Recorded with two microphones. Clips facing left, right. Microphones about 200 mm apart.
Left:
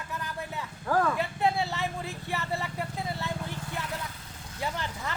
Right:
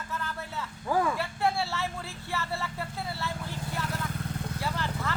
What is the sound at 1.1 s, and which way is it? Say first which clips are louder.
Vehicle: left 1 dB; 20° left (ahead or behind).